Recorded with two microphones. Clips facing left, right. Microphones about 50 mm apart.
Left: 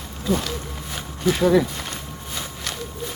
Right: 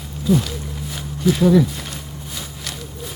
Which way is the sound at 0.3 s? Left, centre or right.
Centre.